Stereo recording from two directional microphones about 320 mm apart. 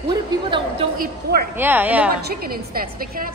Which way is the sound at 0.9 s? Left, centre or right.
Right.